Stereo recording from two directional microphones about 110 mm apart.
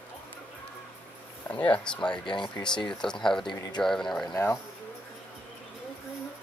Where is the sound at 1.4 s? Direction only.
15° left (ahead or behind).